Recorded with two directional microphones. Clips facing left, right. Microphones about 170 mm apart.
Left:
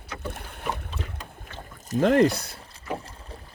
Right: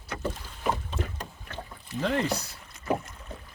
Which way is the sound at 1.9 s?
50° left (ahead or behind).